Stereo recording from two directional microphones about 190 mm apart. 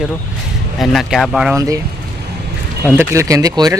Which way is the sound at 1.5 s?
15° right (ahead or behind).